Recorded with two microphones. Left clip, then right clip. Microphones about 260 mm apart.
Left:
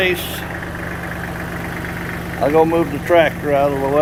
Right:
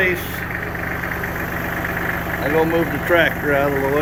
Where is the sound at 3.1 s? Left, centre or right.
Centre.